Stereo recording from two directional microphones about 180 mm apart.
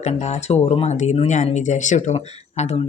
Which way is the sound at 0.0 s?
35° left (ahead or behind).